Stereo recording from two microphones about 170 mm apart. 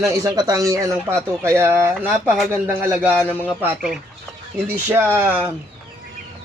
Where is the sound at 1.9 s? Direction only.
5° left (ahead or behind).